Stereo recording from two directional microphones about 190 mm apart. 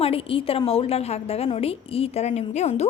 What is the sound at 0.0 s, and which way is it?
A woman's voice, 30° left (ahead or behind).